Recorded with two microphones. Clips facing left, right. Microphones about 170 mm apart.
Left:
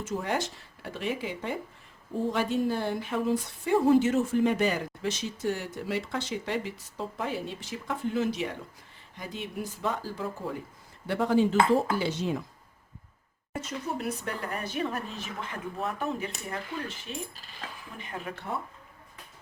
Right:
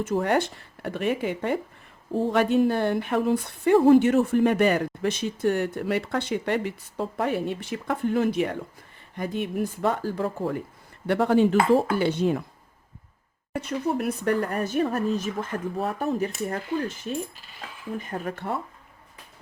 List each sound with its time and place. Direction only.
0.0 s speech: 55° right (ahead or behind)
13.6 s speech: 60° right (ahead or behind); by 16.3 s 40° right (ahead or behind)
17.9 s speech: 40° right (ahead or behind)